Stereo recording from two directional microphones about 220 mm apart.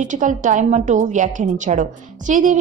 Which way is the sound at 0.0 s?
35° right (ahead or behind).